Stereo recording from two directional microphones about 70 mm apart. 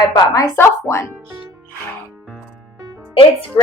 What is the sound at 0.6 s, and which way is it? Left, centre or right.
Speech, left.